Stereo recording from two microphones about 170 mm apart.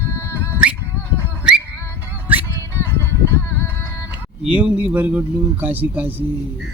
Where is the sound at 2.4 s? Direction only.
15° left (ahead or behind).